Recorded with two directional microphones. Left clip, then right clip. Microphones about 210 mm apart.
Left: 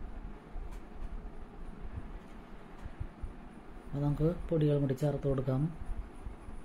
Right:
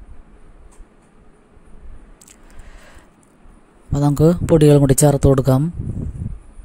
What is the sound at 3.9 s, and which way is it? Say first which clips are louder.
Speech: right 18 dB; 50° right (ahead or behind).